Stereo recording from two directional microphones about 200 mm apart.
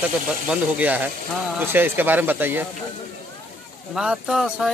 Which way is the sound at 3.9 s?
5° right (ahead or behind).